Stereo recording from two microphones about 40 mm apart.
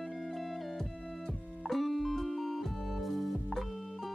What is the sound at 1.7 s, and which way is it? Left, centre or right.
Music, centre.